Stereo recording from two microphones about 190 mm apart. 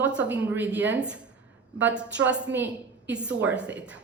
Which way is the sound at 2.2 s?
70° right (ahead or behind).